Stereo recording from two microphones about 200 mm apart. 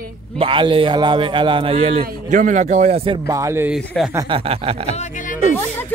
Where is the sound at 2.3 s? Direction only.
40° right (ahead or behind).